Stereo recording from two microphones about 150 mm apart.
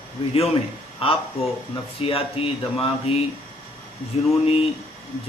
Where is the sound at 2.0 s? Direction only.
40° left (ahead or behind).